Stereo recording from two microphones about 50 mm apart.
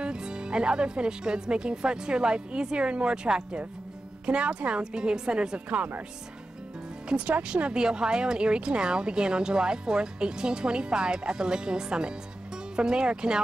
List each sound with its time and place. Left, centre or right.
0.0 s speech: centre
4.3 s speech: centre
7.1 s speech: right